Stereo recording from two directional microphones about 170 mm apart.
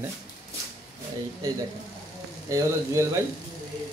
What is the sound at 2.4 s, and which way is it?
Speech, 20° right (ahead or behind).